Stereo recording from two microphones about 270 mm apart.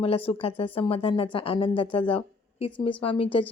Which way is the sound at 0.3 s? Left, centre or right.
Left.